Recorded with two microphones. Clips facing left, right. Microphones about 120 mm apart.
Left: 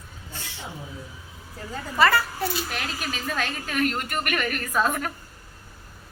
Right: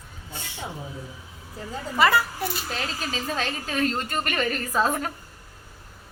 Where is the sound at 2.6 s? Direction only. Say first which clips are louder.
Right 1 dB; 30° right (ahead or behind).